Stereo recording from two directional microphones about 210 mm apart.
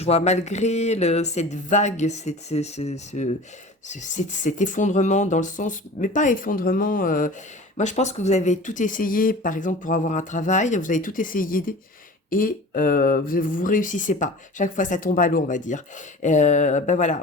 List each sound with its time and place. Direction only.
0.0 s speech: 30° left (ahead or behind)